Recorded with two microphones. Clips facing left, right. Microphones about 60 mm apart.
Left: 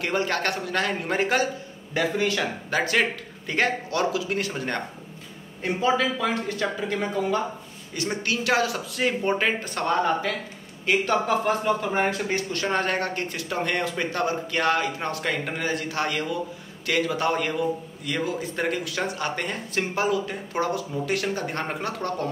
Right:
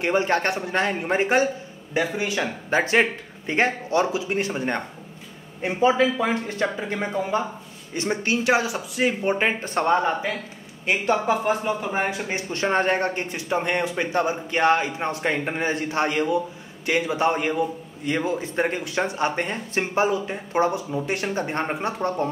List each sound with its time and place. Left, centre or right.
0.0 s a man's voice: right
2.7 s a man's voice: right